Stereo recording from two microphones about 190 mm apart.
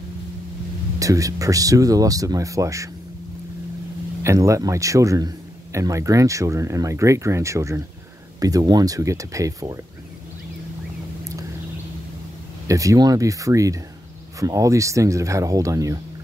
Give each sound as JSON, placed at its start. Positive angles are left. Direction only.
{"t": 0.9, "sound": "a man's voice", "side_deg": -15}
{"t": 4.2, "sound": "a man's voice", "side_deg": -15}
{"t": 12.6, "sound": "a man's voice", "side_deg": -15}